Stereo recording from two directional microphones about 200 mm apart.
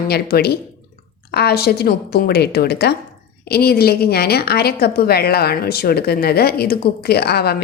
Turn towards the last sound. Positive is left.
turn(degrees=55)  # may be behind; listen again after turning